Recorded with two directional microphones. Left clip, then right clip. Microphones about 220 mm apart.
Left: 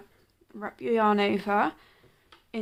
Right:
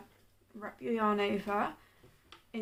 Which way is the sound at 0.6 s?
50° left (ahead or behind).